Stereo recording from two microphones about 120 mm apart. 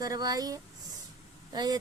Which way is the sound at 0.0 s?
30° right (ahead or behind).